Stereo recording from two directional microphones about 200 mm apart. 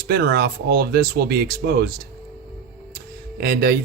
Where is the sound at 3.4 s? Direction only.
50° right (ahead or behind).